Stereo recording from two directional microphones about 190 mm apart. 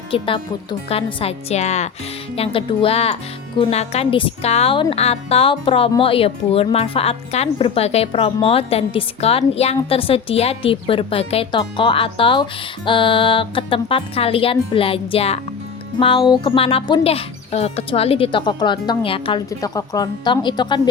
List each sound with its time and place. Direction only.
0.1 s a woman's voice: 25° left (ahead or behind)
19.5 s a woman's voice: 20° left (ahead or behind)